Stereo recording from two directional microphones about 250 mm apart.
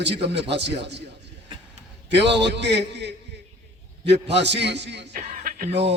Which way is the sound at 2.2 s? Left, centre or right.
Right.